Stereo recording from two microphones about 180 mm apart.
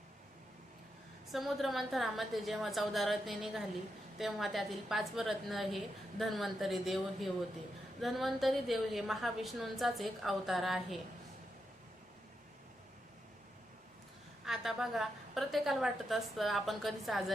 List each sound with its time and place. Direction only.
1.3 s a woman's voice: centre (ahead or behind)
14.4 s a woman's voice: centre (ahead or behind)